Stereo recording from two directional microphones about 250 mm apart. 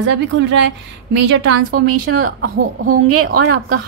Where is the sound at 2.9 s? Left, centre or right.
Right.